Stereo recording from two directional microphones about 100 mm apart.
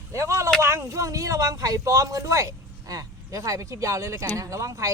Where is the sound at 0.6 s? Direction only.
30° right (ahead or behind).